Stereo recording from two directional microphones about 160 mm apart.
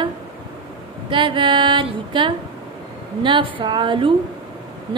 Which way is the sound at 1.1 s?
30° right (ahead or behind).